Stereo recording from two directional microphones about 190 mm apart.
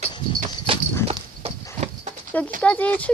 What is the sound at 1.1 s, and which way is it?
Livestock, 30° right (ahead or behind).